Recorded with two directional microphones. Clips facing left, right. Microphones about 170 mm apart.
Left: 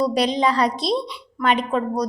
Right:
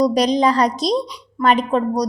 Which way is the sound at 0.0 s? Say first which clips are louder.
Right 4 dB; 40° right (ahead or behind).